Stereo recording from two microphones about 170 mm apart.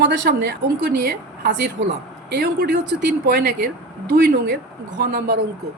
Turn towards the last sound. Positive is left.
turn(degrees=-65)  # may be behind; listen again after turning